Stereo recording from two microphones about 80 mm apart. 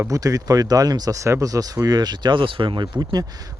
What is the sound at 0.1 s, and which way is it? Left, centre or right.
Speech, right.